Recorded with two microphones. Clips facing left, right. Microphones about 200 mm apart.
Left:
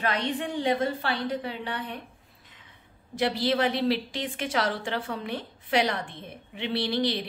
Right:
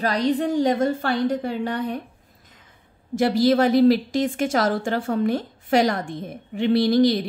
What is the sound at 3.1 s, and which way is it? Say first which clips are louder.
A woman's voice: right 8 dB; 45° right (ahead or behind).